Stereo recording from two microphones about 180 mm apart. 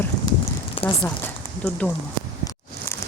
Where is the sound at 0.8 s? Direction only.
30° left (ahead or behind).